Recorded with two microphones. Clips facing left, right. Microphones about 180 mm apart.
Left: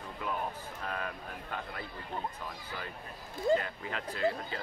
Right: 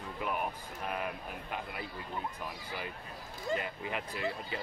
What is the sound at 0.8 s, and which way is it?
Speech, 15° right (ahead or behind).